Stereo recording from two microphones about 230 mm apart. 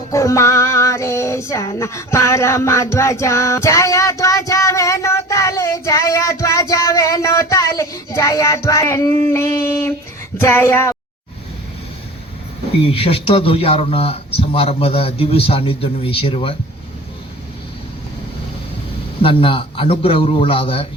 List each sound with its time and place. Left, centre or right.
0.1 s female singing: centre
9.2 s a sound: centre
12.8 s speech: left
19.2 s speech: left